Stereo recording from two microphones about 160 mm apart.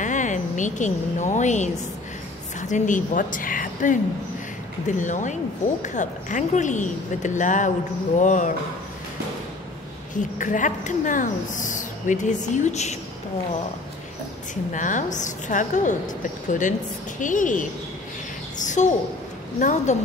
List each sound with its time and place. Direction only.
0.0 s a woman's voice: 50° left (ahead or behind)
2.7 s speech: 50° left (ahead or behind)
10.1 s speech: 50° left (ahead or behind)
14.5 s a woman's voice: 50° left (ahead or behind)
18.7 s a woman's voice: 50° left (ahead or behind)